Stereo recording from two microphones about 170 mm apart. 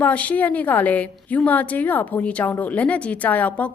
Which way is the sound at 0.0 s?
10° left (ahead or behind).